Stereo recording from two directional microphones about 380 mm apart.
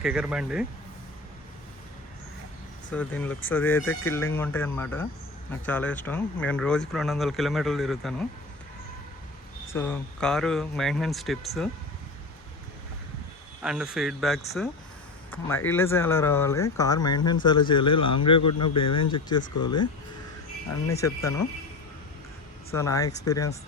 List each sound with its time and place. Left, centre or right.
0.0 s speech: centre
2.9 s speech: centre
9.7 s speech: centre
13.6 s speech: centre
18.3 s speech: left
18.9 s speech: centre
20.9 s speech: centre
22.7 s speech: centre